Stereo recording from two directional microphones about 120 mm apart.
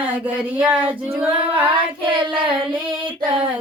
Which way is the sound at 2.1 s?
45° right (ahead or behind).